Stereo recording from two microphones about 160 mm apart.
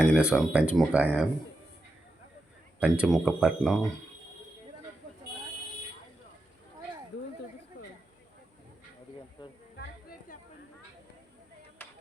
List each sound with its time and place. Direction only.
0.0 s speech: 5° right (ahead or behind)
2.8 s speech: 5° right (ahead or behind)
9.4 s a sound: 25° left (ahead or behind)
11.8 s chop: 10° left (ahead or behind)